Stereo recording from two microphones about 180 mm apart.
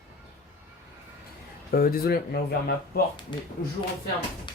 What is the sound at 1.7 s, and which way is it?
Speech, 55° left (ahead or behind).